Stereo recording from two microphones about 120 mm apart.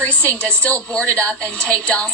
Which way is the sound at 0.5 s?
10° left (ahead or behind).